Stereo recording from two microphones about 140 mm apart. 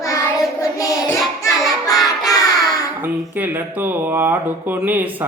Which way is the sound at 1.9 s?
25° left (ahead or behind).